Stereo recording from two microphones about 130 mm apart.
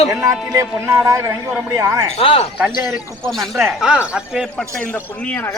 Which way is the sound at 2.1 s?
50° left (ahead or behind).